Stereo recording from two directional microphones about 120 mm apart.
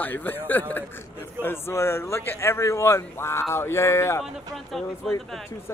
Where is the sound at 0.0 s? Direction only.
15° left (ahead or behind).